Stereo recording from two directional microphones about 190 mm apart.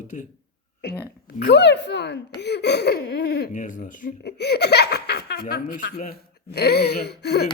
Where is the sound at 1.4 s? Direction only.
65° left (ahead or behind).